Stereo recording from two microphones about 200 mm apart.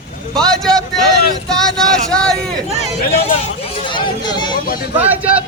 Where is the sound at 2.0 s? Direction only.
5° left (ahead or behind).